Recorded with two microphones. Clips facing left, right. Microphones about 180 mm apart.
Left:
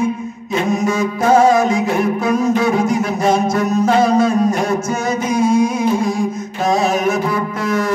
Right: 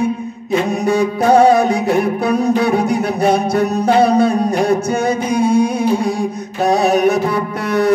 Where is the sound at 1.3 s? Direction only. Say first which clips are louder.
Right 1 dB; 60° right (ahead or behind).